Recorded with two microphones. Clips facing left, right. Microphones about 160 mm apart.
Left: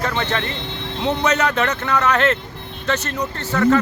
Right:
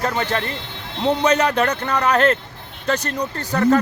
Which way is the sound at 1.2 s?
30° right (ahead or behind).